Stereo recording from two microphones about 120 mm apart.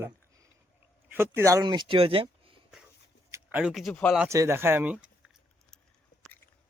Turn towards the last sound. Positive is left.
turn(degrees=-15)  # may be behind; listen again after turning